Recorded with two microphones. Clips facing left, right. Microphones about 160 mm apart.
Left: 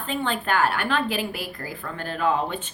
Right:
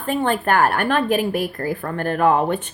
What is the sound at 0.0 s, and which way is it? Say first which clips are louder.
Speech: right 6 dB; 50° right (ahead or behind).